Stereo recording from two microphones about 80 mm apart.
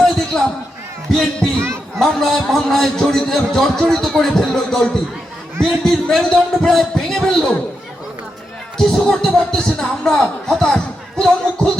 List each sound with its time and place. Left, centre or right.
0.0 s basketball bounce: centre
1.1 s speech: centre
1.5 s a sound: right
2.0 s a man's voice: centre
8.8 s speech: centre